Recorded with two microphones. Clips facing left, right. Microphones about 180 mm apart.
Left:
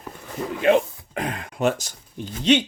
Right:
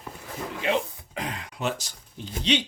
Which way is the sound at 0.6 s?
55° left (ahead or behind).